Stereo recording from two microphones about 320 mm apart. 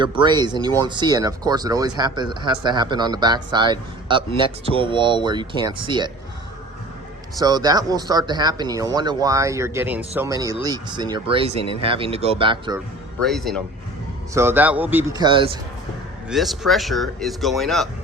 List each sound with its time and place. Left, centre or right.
0.0 s speech: centre
7.3 s speech: centre
13.2 s speech: centre
16.3 s speech: centre